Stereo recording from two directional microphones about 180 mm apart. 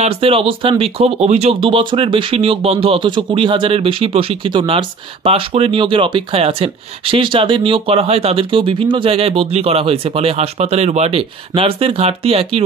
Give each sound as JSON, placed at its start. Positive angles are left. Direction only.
{"t": 0.0, "sound": "speech", "side_deg": -30}